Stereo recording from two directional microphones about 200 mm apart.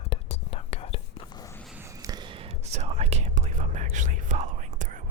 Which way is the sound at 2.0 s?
20° right (ahead or behind).